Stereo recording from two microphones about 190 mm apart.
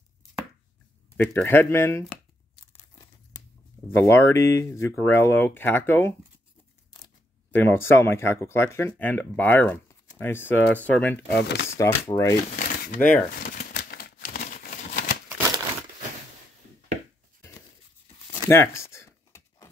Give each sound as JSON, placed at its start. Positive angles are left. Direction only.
{"t": 1.1, "sound": "speech", "side_deg": 10}
{"t": 3.9, "sound": "speech", "side_deg": 15}
{"t": 7.5, "sound": "speech", "side_deg": 10}
{"t": 11.2, "sound": "speech", "side_deg": 65}
{"t": 11.7, "sound": "speech", "side_deg": 15}
{"t": 12.5, "sound": "shuffling cards", "side_deg": 45}
{"t": 13.1, "sound": "crumpling", "side_deg": 50}
{"t": 18.3, "sound": "a sound", "side_deg": 15}